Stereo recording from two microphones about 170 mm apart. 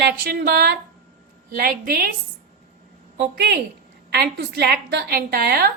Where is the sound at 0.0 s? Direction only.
65° right (ahead or behind).